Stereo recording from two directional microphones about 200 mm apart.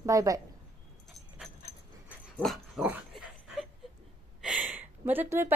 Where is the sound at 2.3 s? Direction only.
Centre (ahead or behind).